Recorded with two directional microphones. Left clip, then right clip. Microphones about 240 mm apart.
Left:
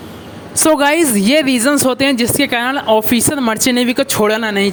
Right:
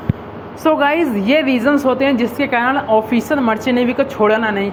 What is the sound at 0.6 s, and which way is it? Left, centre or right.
Speech, left.